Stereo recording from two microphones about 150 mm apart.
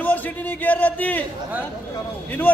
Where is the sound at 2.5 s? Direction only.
10° left (ahead or behind).